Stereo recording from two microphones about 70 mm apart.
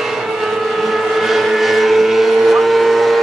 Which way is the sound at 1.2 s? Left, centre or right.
Centre.